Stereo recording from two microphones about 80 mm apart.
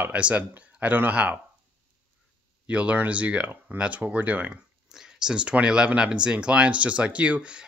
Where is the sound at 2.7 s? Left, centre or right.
Centre.